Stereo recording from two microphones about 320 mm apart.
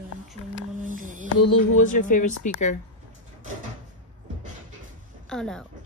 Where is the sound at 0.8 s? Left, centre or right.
Right.